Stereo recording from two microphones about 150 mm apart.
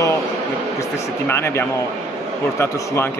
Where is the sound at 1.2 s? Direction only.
15° left (ahead or behind).